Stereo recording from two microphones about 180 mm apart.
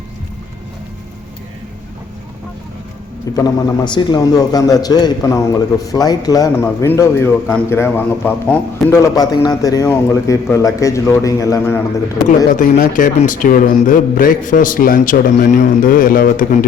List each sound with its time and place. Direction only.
3.3 s a man's voice: 20° left (ahead or behind)
12.2 s speech: centre (ahead or behind)
12.5 s a man's voice: 50° left (ahead or behind)